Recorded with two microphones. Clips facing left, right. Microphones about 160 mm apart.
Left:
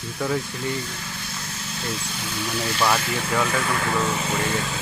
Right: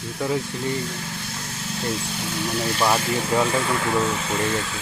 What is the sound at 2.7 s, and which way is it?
Speech, 20° right (ahead or behind).